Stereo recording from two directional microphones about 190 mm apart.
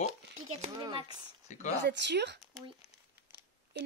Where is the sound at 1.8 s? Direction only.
65° right (ahead or behind).